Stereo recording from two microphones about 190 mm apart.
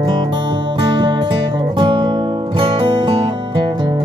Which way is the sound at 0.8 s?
25° right (ahead or behind).